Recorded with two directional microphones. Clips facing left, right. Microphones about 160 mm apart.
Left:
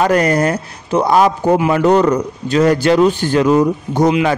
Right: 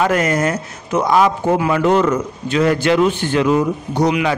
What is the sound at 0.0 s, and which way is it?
A man's voice, 35° left (ahead or behind).